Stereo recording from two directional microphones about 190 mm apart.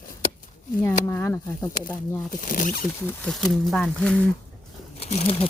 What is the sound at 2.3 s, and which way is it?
Speech, 45° left (ahead or behind).